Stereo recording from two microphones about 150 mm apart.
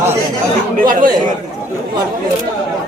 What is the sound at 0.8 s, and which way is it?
Speech, 65° right (ahead or behind).